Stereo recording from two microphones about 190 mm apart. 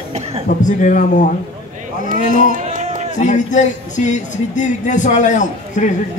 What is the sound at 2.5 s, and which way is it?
Music, 40° right (ahead or behind).